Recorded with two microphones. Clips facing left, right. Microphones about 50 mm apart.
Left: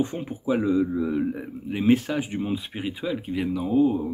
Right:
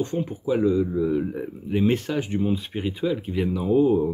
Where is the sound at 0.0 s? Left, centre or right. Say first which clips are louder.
Right 1 dB; centre.